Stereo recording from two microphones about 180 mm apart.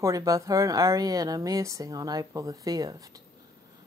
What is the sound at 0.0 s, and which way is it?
A woman's voice, 20° right (ahead or behind).